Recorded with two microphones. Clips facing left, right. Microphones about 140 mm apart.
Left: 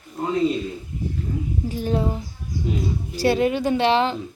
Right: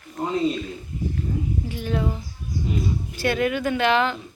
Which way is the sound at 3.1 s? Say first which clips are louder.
Left 4 dB; 35° left (ahead or behind).